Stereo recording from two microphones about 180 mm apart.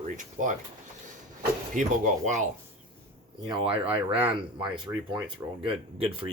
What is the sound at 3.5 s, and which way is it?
Speech, 30° right (ahead or behind).